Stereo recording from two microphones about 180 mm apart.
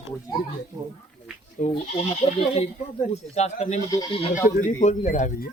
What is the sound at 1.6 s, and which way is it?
Speech, 35° left (ahead or behind).